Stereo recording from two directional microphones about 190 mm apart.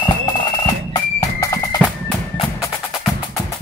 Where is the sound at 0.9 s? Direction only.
15° left (ahead or behind).